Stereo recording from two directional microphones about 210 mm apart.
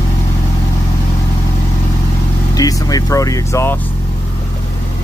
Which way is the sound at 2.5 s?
15° left (ahead or behind).